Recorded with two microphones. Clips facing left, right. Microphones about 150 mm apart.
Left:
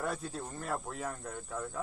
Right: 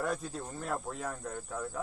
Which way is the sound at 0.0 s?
5° left (ahead or behind).